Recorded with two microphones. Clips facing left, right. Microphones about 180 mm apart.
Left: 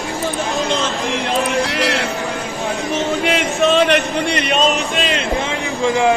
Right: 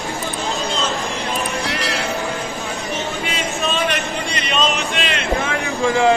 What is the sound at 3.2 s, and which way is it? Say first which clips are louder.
Speech: left 7 dB; 75° left (ahead or behind).